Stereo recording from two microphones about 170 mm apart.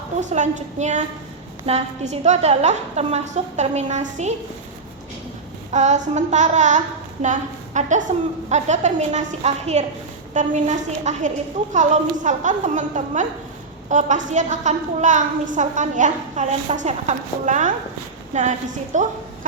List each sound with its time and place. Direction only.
0.2 s a woman's voice: 45° right (ahead or behind)
5.7 s a woman's voice: 45° right (ahead or behind)